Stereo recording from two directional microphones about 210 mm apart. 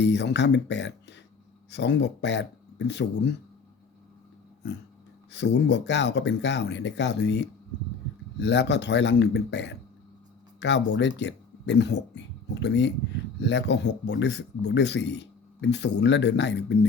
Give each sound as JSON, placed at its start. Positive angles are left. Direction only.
{"t": 0.0, "sound": "speech", "side_deg": 55}
{"t": 5.3, "sound": "speech", "side_deg": 55}